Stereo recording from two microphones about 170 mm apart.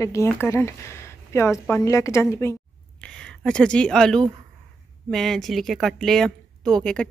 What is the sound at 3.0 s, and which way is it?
Speech, 5° left (ahead or behind).